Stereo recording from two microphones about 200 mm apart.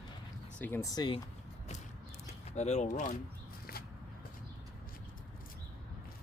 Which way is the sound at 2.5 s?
35° left (ahead or behind).